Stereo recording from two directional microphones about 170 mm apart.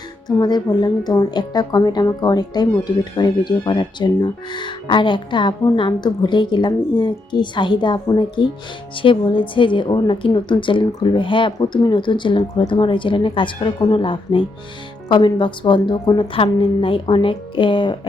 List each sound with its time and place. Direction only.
0.3 s speech: 25° left (ahead or behind)